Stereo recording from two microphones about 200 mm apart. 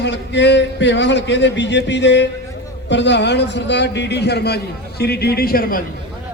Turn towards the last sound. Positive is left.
turn(degrees=45)  # may be behind; listen again after turning